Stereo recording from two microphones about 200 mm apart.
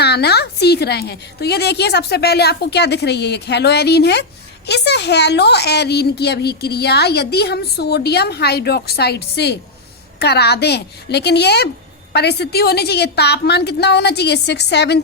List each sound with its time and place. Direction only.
0.0 s a woman's voice: 55° left (ahead or behind)